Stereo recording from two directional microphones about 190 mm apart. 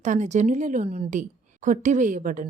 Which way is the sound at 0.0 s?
40° right (ahead or behind).